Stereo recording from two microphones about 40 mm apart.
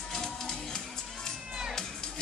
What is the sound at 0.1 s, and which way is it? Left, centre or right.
Music, centre.